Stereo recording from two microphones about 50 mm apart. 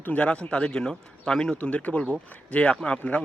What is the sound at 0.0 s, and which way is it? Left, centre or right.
Speech, left.